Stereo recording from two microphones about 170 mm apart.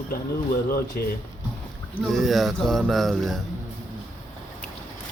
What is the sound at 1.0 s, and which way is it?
Speech, 60° left (ahead or behind).